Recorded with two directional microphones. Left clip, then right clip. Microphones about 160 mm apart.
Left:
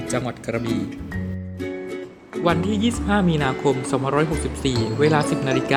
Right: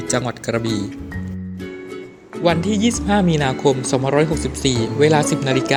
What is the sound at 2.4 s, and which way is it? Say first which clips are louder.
Speech: right 3 dB; 30° right (ahead or behind).